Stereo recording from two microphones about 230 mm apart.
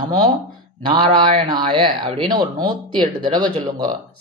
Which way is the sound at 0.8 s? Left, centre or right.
Right.